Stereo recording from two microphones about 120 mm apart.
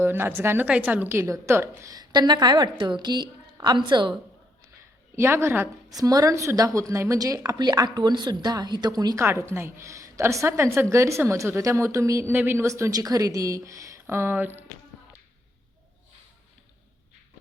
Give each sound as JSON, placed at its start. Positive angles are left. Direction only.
{"t": 0.0, "sound": "a woman's voice", "side_deg": -20}
{"t": 5.1, "sound": "a woman's voice", "side_deg": -20}
{"t": 5.9, "sound": "a woman's voice", "side_deg": -30}
{"t": 9.2, "sound": "a woman's voice", "side_deg": -20}